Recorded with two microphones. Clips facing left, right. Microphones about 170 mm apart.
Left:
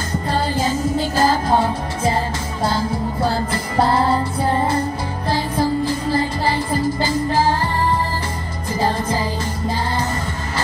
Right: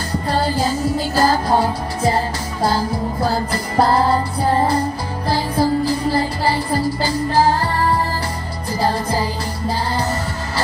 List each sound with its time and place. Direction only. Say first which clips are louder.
0.3 s music: right 1 dB; 35° right (ahead or behind)
8.7 s music: right 1 dB; 35° right (ahead or behind)